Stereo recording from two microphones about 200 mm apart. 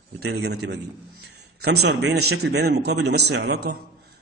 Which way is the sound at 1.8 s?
60° right (ahead or behind).